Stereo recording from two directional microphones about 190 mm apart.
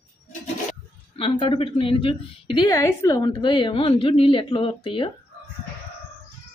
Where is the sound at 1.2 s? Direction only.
25° left (ahead or behind).